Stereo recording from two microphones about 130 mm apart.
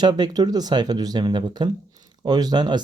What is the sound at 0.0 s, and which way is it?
Speech, 35° right (ahead or behind).